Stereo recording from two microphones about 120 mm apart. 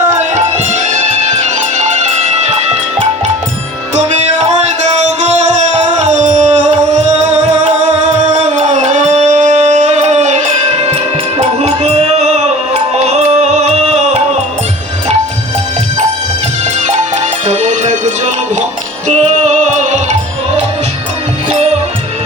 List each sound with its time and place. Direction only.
0.1 s music: 75° right (ahead or behind)
3.9 s music: 75° right (ahead or behind)
8.2 s music: 70° right (ahead or behind)
16.8 s music: 80° right